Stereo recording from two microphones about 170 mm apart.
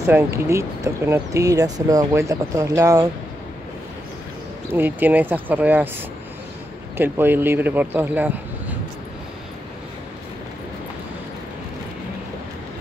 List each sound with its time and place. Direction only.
0.0 s speech: 15° right (ahead or behind)
4.7 s speech: 10° right (ahead or behind)
7.0 s speech: 10° right (ahead or behind)